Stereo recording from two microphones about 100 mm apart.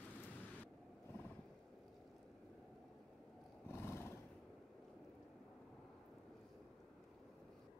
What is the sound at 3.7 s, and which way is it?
Roar, 25° left (ahead or behind).